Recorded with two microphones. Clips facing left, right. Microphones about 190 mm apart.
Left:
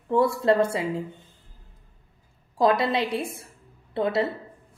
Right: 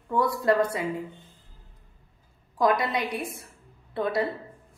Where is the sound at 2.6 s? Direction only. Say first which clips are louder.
Left 3 dB; 25° left (ahead or behind).